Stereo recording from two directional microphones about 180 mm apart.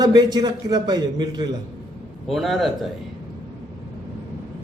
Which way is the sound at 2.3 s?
Centre (ahead or behind).